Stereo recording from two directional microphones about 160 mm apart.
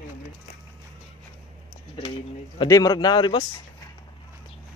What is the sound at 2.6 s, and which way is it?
Speech, 20° left (ahead or behind).